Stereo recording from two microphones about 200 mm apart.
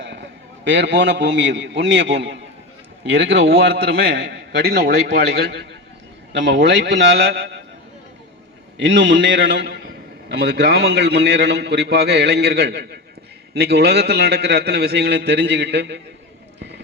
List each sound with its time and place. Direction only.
0.0 s a man's voice: 65° right (ahead or behind)
8.8 s a man's voice: 60° right (ahead or behind)